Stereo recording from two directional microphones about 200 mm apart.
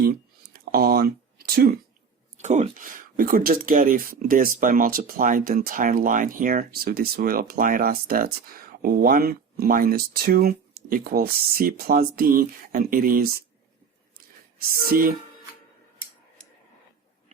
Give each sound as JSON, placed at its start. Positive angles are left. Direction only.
{"t": 0.5, "sound": "a sound", "side_deg": -50}
{"t": 2.4, "sound": "speech", "side_deg": -40}
{"t": 14.8, "sound": "speech", "side_deg": -45}